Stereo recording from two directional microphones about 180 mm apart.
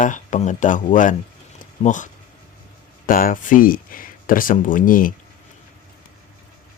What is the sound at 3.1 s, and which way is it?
Speech, 50° left (ahead or behind).